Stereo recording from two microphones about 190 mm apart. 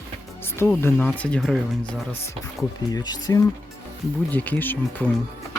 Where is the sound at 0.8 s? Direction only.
10° left (ahead or behind).